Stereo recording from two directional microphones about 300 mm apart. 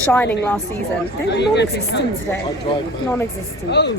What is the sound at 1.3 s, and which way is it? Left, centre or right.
Speech, left.